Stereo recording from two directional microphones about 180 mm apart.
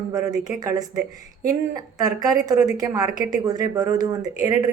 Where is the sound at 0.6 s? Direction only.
20° right (ahead or behind).